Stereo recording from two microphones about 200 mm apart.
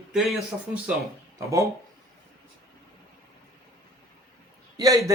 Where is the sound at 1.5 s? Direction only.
15° right (ahead or behind).